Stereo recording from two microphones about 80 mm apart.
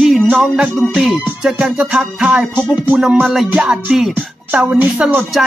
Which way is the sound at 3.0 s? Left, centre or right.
Centre.